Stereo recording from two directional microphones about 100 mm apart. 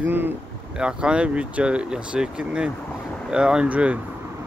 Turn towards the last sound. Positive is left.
turn(degrees=-10)  # may be behind; listen again after turning